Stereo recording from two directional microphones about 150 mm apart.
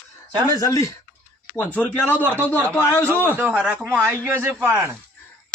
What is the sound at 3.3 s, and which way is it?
Speech, 15° right (ahead or behind).